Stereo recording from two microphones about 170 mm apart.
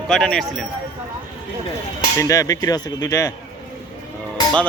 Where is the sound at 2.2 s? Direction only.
20° left (ahead or behind).